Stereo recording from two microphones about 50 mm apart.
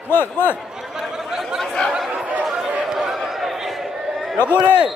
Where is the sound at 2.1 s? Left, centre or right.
Right.